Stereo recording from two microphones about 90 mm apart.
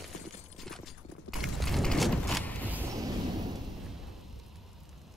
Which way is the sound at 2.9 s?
45° right (ahead or behind).